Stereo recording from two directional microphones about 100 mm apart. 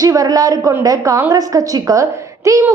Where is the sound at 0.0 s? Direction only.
35° right (ahead or behind).